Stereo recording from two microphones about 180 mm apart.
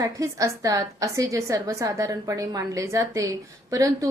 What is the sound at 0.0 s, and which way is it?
A woman's voice, 20° right (ahead or behind).